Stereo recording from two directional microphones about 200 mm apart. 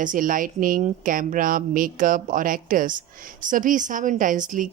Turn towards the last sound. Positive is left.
turn(degrees=-40)  # may be behind; listen again after turning